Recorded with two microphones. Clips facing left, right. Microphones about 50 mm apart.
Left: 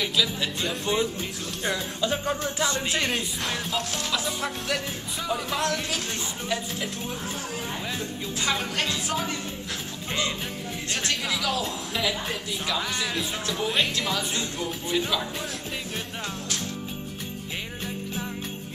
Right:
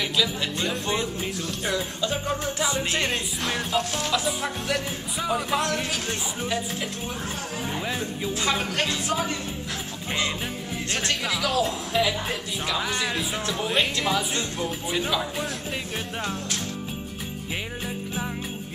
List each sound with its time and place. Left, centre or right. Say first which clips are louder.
0.0 s music: right 1 dB; centre
1.6 s speech: right 1 dB; centre
2.0 s music: even; centre
2.6 s speech: even; centre
2.9 s music: right 1 dB; centre
7.1 s speech: right 1 dB; centre
10.9 s music: right 1 dB; centre
13.5 s speech: right 1 dB; centre